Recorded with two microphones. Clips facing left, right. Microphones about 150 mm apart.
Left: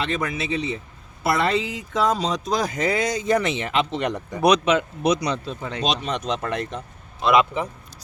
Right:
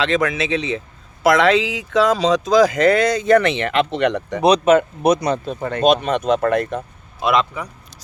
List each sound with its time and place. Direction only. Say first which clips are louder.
0.0 s speech: right 7 dB; 90° right; by 4.4 s 75° right (ahead or behind)
4.6 s speech: right 6 dB; 50° right (ahead or behind)
7.6 s a man's voice: left 3 dB; 25° left (ahead or behind)